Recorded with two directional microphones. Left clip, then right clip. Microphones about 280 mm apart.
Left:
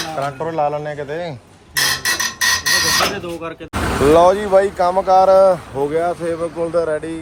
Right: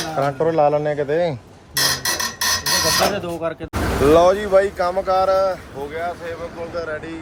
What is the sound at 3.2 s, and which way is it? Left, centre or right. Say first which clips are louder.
Speech: right 2 dB; right.